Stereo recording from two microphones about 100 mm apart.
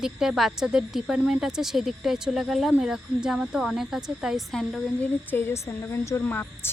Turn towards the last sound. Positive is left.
turn(degrees=20)  # may be behind; listen again after turning